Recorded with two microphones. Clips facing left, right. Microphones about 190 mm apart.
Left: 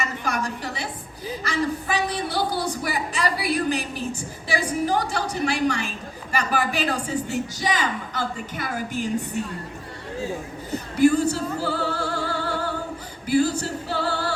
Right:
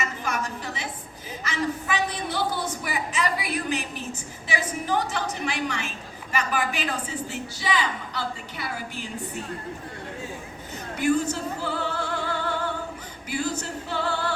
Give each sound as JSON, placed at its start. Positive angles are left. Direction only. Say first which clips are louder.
{"t": 0.0, "sound": "a sound", "louder": "left 2 dB", "side_deg": 35}
{"t": 4.9, "sound": "a woman's voice", "louder": "left 2 dB", "side_deg": 35}
{"t": 10.7, "sound": "opera", "louder": "left 6 dB", "side_deg": 35}
{"t": 13.2, "sound": "music", "louder": "left 8 dB", "side_deg": 35}